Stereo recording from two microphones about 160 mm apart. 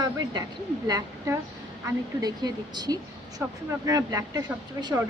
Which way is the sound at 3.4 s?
15° right (ahead or behind).